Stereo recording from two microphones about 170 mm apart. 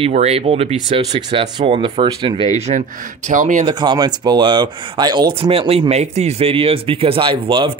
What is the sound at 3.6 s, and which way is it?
Speech, 25° right (ahead or behind).